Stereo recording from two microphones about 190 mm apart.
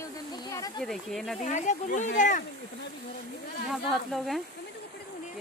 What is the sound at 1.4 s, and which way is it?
Speech, 40° left (ahead or behind).